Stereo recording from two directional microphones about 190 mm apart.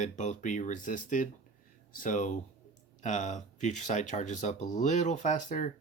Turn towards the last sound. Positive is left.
turn(degrees=40)  # may be behind; listen again after turning